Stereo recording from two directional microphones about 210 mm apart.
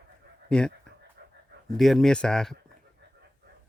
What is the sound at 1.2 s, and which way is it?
Dog, 45° right (ahead or behind).